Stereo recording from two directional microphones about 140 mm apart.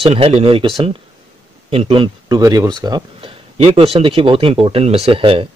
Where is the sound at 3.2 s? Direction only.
45° right (ahead or behind).